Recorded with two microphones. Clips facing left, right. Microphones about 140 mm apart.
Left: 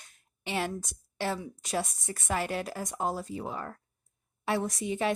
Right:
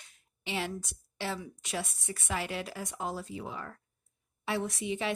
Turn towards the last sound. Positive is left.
turn(degrees=45)  # may be behind; listen again after turning